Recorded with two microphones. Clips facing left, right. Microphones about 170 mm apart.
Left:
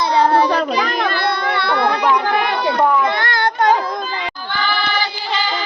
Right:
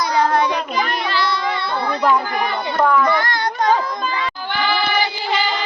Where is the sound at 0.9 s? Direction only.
50° left (ahead or behind); by 2.7 s 75° left (ahead or behind).